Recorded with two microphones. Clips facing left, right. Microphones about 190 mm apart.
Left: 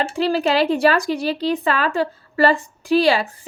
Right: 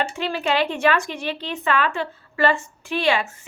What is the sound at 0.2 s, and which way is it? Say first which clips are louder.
Speech: left 7 dB; 35° left (ahead or behind).